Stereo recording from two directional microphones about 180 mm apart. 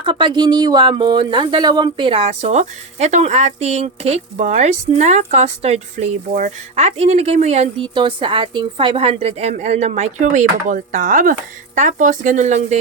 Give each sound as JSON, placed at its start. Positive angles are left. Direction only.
{"t": 0.0, "sound": "speech", "side_deg": -25}